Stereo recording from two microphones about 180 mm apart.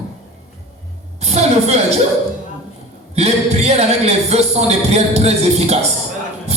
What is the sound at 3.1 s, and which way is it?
A man's voice, 35° right (ahead or behind).